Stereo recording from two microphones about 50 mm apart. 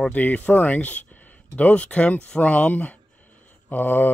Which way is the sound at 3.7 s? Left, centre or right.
Left.